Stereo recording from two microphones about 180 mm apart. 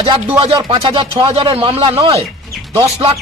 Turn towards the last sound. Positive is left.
turn(degrees=-25)  # may be behind; listen again after turning